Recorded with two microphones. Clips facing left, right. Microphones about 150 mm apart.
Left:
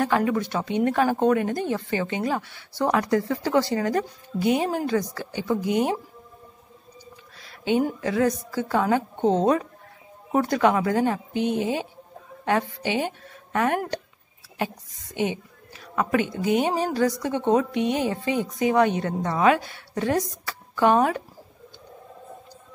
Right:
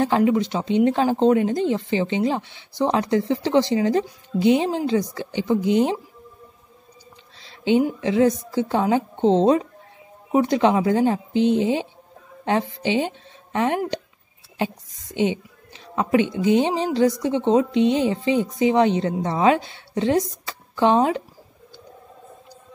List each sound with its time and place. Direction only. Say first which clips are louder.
0.0 s a woman's voice: right 4 dB; 25° right (ahead or behind)
7.3 s a sound: right 4 dB; 25° right (ahead or behind)
8.0 s a woman's voice: right 4 dB; 25° right (ahead or behind)